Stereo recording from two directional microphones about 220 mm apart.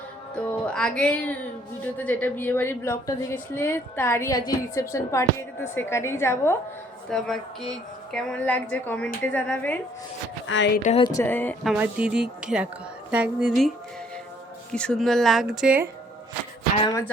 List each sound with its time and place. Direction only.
0.3 s a woman's voice: 5° left (ahead or behind)
7.1 s a woman's voice: centre (ahead or behind)
10.4 s a woman's voice: 60° left (ahead or behind)
10.8 s a woman's voice: 20° left (ahead or behind)
11.7 s a woman's voice: 5° right (ahead or behind)